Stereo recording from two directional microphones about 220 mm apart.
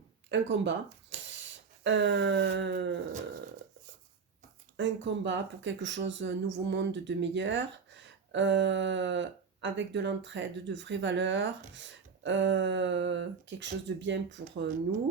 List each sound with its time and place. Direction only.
0.3 s speech: 55° right (ahead or behind)
4.8 s speech: 55° right (ahead or behind)